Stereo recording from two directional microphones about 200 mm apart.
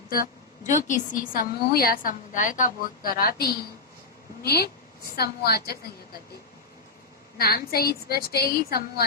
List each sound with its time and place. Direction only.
0.7 s a woman's voice: 40° left (ahead or behind)
4.4 s a woman's voice: 50° left (ahead or behind)
7.3 s a woman's voice: 50° left (ahead or behind)